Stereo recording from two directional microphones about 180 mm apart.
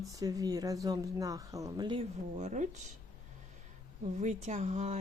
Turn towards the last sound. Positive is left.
turn(degrees=-40)  # may be behind; listen again after turning